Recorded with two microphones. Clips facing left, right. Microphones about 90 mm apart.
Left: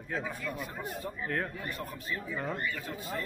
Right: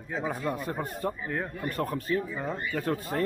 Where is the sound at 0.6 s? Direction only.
40° right (ahead or behind).